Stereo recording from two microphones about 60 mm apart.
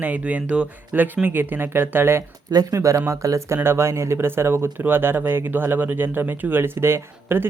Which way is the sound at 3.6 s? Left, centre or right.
Right.